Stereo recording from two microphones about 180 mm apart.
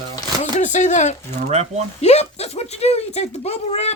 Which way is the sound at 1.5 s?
35° right (ahead or behind).